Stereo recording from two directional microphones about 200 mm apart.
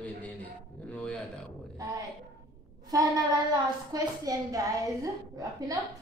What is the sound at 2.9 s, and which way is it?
A woman's voice, 15° right (ahead or behind).